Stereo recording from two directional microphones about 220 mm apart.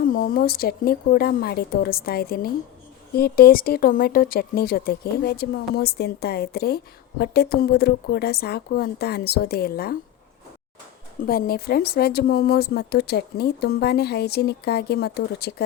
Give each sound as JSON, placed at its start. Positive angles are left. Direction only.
{"t": 0.0, "sound": "speech", "side_deg": 40}
{"t": 11.3, "sound": "speech", "side_deg": 45}